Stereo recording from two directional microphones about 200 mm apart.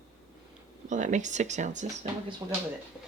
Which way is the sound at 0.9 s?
40° right (ahead or behind).